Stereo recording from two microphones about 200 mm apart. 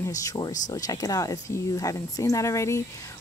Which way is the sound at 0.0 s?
15° left (ahead or behind).